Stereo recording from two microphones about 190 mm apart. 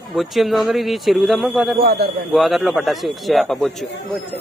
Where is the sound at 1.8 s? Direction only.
55° right (ahead or behind).